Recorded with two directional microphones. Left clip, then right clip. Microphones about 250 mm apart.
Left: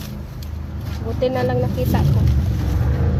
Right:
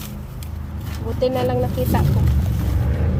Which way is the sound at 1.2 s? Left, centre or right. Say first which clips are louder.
Even; right.